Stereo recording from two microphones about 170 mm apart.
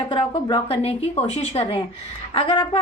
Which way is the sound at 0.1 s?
30° left (ahead or behind).